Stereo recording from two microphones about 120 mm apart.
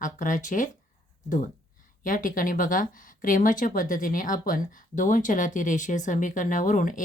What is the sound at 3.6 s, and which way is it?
Speech, 90° left.